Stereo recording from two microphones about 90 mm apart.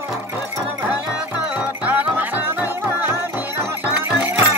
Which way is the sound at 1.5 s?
20° right (ahead or behind).